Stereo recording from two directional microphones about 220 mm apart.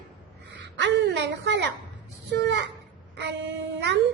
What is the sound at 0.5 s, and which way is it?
A woman's voice, 55° right (ahead or behind).